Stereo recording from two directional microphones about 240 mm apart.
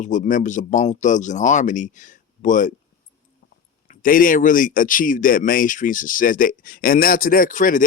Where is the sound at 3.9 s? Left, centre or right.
Left.